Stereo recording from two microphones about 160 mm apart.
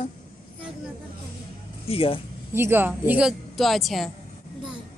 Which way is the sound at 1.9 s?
35° left (ahead or behind).